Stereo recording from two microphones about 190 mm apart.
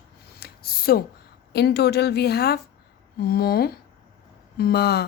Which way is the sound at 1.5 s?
60° left (ahead or behind).